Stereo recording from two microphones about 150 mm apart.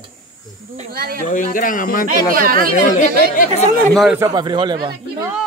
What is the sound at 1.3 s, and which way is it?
Speech, 65° left (ahead or behind).